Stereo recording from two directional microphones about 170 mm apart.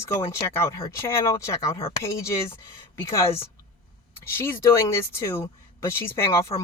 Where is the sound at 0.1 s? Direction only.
15° left (ahead or behind).